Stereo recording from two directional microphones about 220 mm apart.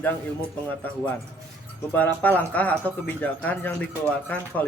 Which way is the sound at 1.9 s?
5° left (ahead or behind).